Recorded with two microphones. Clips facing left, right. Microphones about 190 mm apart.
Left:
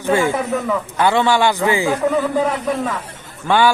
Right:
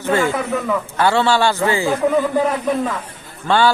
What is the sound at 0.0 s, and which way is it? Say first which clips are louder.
A man's voice: left 1 dB; 15° left (ahead or behind).